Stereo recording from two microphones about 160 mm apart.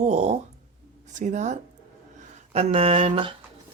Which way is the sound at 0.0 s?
45° right (ahead or behind).